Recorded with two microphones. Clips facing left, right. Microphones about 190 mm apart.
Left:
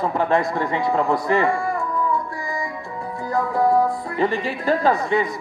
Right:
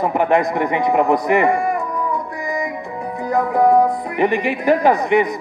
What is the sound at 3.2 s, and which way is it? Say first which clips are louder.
A man's voice: right 4 dB; 20° right (ahead or behind).